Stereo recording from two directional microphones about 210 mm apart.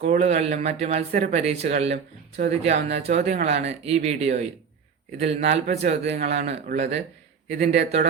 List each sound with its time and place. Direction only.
0.0 s speech: 35° right (ahead or behind)